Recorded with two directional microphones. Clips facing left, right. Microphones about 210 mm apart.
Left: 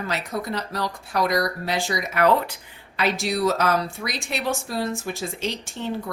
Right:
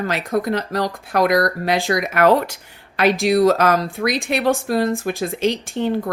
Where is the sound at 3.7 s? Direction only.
90° right.